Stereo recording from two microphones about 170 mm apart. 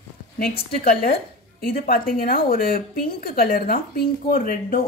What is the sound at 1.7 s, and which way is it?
Speech, 60° left (ahead or behind).